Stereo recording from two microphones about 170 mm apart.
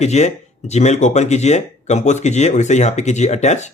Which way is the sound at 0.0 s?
40° left (ahead or behind).